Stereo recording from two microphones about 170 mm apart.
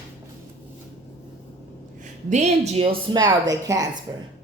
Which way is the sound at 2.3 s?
40° right (ahead or behind).